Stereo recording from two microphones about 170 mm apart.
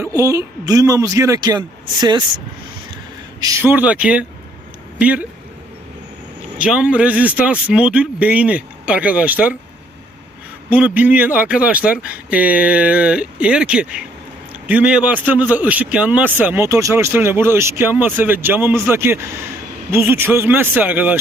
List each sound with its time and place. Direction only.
0.0 s speech: 20° right (ahead or behind)
3.6 s a man's voice: 10° right (ahead or behind)
6.6 s a man's voice: 5° right (ahead or behind)
10.7 s a man's voice: 10° right (ahead or behind)